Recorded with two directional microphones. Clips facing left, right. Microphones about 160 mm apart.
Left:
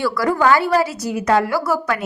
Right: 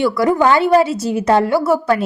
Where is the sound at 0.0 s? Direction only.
20° right (ahead or behind).